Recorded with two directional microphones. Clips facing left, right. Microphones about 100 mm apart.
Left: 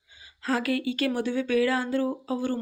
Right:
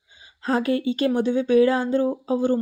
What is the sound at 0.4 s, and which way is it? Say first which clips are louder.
Speech: right 5 dB; 30° right (ahead or behind).